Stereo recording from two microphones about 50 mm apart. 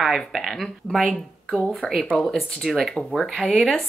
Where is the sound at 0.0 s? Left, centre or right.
Centre.